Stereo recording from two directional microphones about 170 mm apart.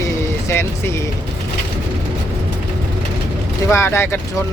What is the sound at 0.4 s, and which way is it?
Speech, 15° left (ahead or behind).